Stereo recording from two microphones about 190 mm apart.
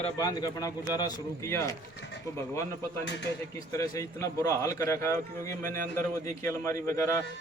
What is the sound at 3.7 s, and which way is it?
A man's voice, 20° left (ahead or behind).